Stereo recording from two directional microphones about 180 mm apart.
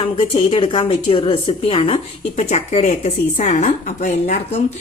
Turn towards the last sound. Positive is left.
turn(degrees=40)  # may be behind; listen again after turning